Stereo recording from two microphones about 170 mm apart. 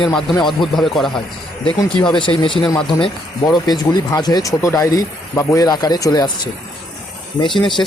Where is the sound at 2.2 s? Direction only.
30° left (ahead or behind).